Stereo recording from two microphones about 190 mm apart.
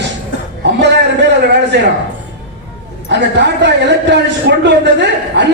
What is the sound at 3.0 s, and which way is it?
A man's voice, 65° right (ahead or behind).